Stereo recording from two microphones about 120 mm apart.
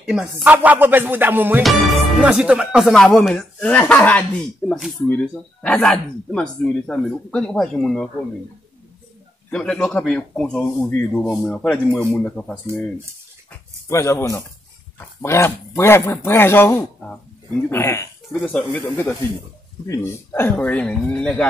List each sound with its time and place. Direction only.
0.0 s speech: 5° right (ahead or behind)
1.6 s speech: centre (ahead or behind)
4.6 s speech: 5° right (ahead or behind)
5.0 s speech: 10° left (ahead or behind)
9.5 s speech: 5° left (ahead or behind)
12.0 s speech: 20° left (ahead or behind)
12.3 s speech: 10° left (ahead or behind)
13.8 s speech: 25° left (ahead or behind)
18.4 s speech: 10° left (ahead or behind)